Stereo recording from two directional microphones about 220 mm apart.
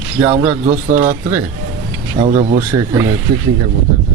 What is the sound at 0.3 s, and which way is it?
Speech, 30° right (ahead or behind).